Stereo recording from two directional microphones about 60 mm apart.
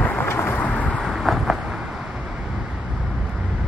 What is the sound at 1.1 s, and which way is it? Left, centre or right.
Vehicle, centre.